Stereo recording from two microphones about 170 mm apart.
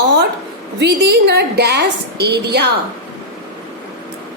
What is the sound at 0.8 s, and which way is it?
A woman's voice, 90° right.